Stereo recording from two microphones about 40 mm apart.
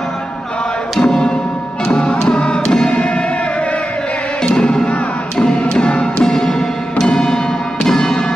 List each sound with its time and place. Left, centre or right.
1.0 s music: left
4.6 s music: centre
7.0 s timpani: centre
7.8 s church bell: centre